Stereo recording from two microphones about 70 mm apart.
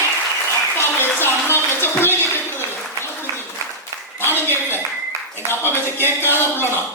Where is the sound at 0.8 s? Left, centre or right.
Left.